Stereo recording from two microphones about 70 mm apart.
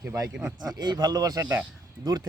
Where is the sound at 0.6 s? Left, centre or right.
Right.